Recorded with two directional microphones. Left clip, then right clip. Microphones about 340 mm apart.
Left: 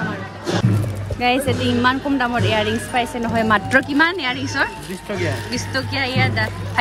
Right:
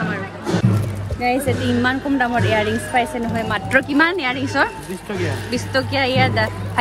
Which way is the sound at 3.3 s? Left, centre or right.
Centre.